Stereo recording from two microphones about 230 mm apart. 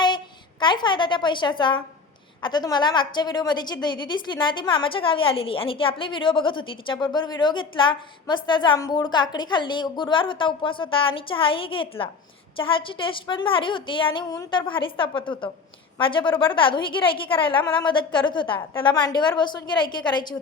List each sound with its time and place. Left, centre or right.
0.6 s a woman's voice: centre